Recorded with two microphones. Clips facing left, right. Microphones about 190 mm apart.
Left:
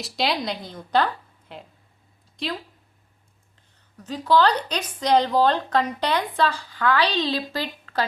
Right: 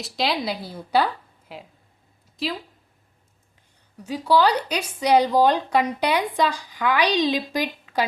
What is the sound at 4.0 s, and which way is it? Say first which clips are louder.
A woman's voice: even; 10° right (ahead or behind).